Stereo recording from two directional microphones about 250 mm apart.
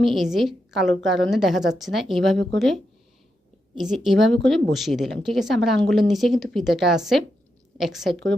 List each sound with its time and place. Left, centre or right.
0.0 s a woman's voice: centre